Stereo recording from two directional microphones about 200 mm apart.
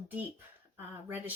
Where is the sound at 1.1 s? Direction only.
10° right (ahead or behind).